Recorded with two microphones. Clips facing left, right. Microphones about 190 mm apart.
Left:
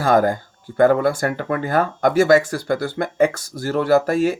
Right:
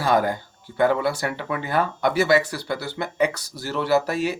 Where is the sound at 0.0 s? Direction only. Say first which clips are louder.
Left 4 dB; 45° left (ahead or behind).